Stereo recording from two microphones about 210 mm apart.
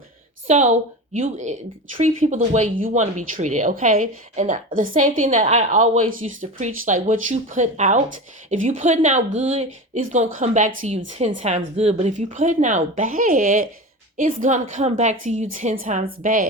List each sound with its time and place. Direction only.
0.4 s speech: 35° right (ahead or behind)